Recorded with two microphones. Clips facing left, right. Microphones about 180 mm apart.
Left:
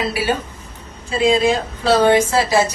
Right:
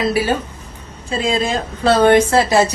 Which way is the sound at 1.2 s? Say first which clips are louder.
Left 4 dB; 50° right (ahead or behind).